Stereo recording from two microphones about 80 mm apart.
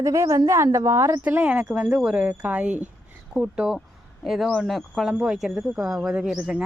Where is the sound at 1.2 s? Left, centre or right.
Right.